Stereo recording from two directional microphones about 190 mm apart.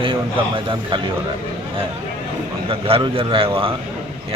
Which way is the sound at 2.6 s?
30° right (ahead or behind).